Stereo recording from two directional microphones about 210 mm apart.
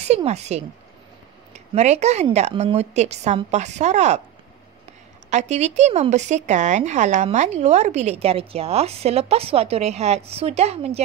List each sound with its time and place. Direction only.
0.0 s speech: 30° right (ahead or behind)
5.3 s speech: 35° right (ahead or behind)